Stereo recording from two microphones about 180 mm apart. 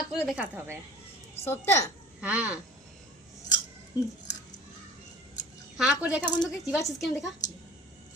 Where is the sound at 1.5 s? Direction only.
15° left (ahead or behind).